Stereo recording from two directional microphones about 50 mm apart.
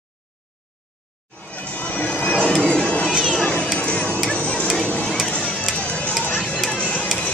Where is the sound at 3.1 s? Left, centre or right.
Centre.